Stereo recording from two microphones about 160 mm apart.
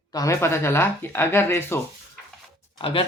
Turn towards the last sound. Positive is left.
turn(degrees=35)  # may be behind; listen again after turning